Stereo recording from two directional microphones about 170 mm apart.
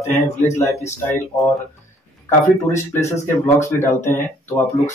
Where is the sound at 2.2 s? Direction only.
15° left (ahead or behind).